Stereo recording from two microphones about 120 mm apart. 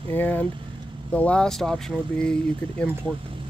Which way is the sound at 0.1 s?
15° left (ahead or behind).